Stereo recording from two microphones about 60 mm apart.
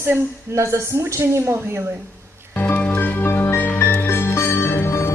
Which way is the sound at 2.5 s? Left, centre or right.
Left.